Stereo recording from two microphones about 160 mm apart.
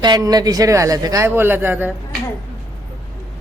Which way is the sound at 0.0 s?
25° right (ahead or behind).